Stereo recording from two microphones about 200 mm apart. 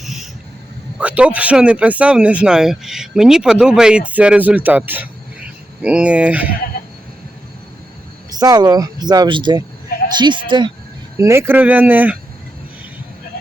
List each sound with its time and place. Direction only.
0.9 s a man's voice: 5° right (ahead or behind)
8.3 s speech: 20° right (ahead or behind)
11.2 s speech: 15° right (ahead or behind)